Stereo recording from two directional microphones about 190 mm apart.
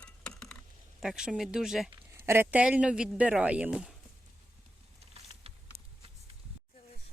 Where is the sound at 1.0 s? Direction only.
5° right (ahead or behind).